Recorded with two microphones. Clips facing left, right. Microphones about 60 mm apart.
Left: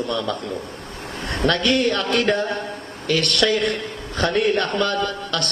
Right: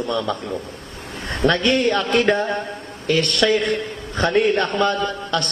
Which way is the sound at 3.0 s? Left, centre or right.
Centre.